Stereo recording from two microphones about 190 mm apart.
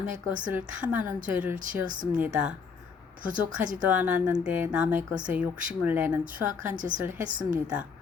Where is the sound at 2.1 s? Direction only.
5° right (ahead or behind).